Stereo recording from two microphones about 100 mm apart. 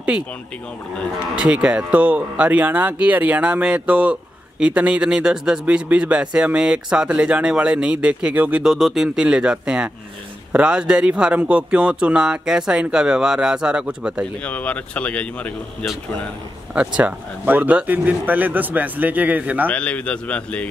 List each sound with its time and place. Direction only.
1.3 s speech: 10° right (ahead or behind)
14.4 s speech: 15° left (ahead or behind)
16.7 s speech: 10° right (ahead or behind)
19.7 s speech: 15° left (ahead or behind)